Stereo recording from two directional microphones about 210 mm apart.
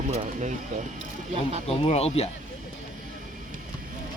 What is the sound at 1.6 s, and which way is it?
Speech, 30° left (ahead or behind).